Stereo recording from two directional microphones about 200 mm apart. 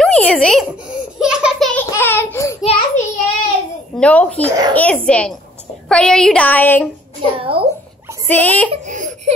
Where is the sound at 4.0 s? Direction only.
5° left (ahead or behind).